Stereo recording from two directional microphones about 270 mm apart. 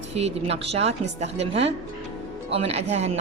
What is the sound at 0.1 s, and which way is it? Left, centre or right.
A woman's voice, right.